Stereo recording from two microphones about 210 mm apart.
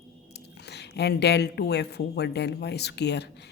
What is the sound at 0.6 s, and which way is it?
A woman's voice, 55° left (ahead or behind).